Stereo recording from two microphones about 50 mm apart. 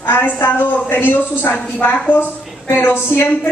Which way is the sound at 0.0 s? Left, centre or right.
Left.